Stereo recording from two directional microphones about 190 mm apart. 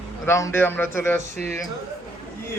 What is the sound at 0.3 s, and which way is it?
Speech, 15° left (ahead or behind).